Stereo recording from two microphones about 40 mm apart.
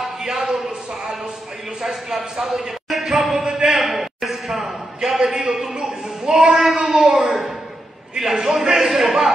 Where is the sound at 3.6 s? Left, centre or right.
Centre.